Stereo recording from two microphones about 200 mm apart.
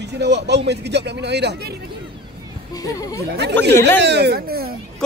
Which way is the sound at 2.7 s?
15° left (ahead or behind).